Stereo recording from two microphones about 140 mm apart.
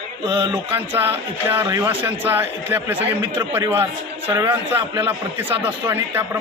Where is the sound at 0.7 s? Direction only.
15° right (ahead or behind).